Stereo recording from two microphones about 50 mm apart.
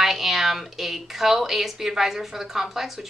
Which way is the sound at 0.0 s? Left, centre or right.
Centre.